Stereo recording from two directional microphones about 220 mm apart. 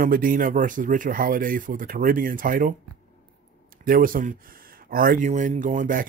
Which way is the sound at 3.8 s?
40° right (ahead or behind).